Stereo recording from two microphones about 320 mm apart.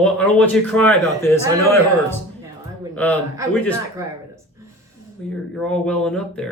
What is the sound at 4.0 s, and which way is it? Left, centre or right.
Speech, centre.